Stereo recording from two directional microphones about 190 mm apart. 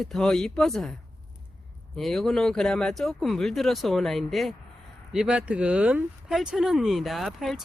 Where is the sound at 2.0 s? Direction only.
Centre (ahead or behind).